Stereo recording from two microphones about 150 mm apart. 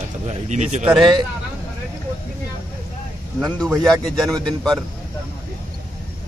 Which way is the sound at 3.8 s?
Centre (ahead or behind).